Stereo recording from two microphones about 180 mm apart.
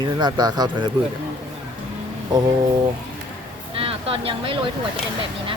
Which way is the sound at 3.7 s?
30° right (ahead or behind).